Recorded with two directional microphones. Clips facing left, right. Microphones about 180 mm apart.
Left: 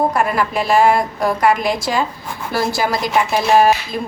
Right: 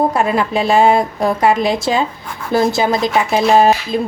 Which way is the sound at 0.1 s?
25° right (ahead or behind).